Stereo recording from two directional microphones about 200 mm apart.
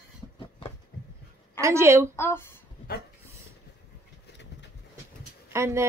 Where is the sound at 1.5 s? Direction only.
15° right (ahead or behind).